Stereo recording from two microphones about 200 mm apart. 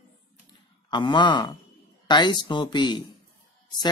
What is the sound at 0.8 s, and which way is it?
Speech, 20° left (ahead or behind).